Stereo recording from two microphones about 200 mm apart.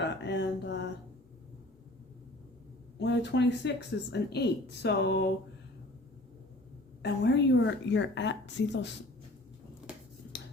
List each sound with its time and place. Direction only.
0.3 s mantra: 60° left (ahead or behind)
3.0 s speech: 60° left (ahead or behind)
7.0 s speech: 60° left (ahead or behind)
10.3 s finger snapping: 60° left (ahead or behind)